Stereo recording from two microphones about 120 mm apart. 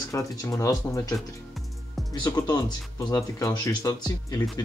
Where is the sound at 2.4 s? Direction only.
35° left (ahead or behind).